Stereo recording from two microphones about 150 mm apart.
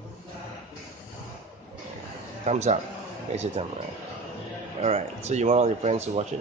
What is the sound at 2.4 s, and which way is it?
Speech, 50° right (ahead or behind).